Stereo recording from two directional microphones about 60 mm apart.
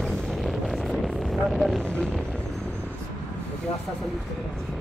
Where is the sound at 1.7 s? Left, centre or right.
Centre.